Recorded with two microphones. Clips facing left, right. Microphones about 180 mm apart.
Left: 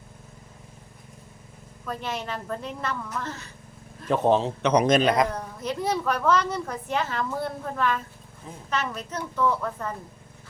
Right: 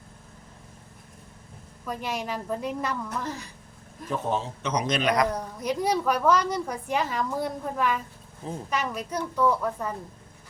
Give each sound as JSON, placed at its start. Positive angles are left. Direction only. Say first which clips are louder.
{"t": 1.8, "sound": "a woman's voice", "louder": "even", "side_deg": -10}
{"t": 4.1, "sound": "a man's voice", "louder": "left 7 dB", "side_deg": 75}
{"t": 5.3, "sound": "a woman's voice", "louder": "right 2 dB", "side_deg": -10}